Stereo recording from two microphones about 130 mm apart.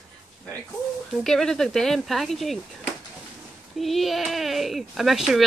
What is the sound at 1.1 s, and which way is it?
Speech, 5° left (ahead or behind).